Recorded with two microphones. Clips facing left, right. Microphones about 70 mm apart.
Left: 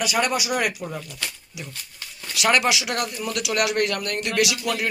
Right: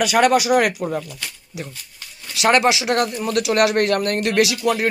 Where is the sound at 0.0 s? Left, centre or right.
Right.